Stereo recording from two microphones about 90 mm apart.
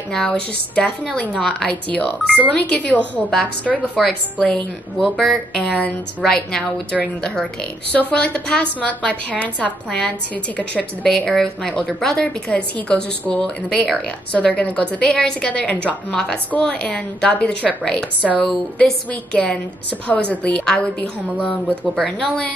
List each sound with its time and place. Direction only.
0.1 s a woman's voice: 5° left (ahead or behind)
1.9 s a woman's voice: 15° left (ahead or behind)